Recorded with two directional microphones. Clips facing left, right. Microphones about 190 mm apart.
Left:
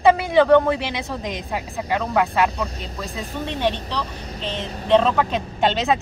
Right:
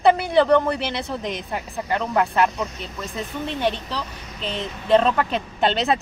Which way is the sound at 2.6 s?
35° left (ahead or behind).